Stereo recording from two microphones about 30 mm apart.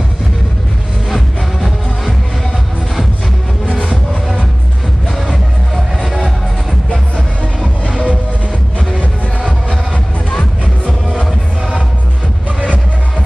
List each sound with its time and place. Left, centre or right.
1.1 s music: centre
7.8 s music: right